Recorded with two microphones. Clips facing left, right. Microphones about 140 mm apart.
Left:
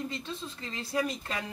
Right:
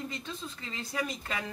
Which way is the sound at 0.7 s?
30° left (ahead or behind).